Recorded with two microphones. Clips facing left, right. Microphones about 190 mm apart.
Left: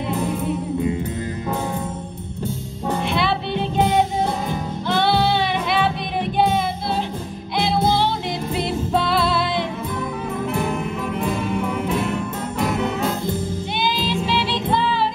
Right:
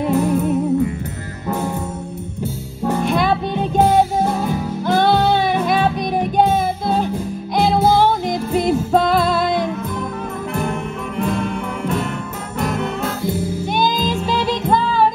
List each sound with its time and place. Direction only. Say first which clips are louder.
3.1 s music: right 4 dB; 45° right (ahead or behind)
7.5 s music: right 5 dB; 45° right (ahead or behind)
10.5 s music: right 2 dB; 5° left (ahead or behind)
13.7 s music: right 3 dB; 45° right (ahead or behind)